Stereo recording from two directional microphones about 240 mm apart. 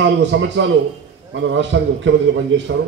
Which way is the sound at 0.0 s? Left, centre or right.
Right.